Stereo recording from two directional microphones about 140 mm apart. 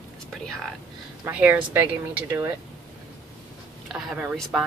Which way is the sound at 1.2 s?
15° right (ahead or behind).